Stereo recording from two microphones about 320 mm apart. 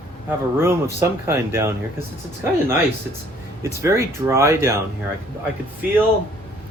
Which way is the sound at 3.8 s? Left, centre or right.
Centre.